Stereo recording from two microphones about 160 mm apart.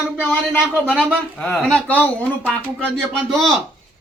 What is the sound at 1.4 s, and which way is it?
Speech, 10° left (ahead or behind).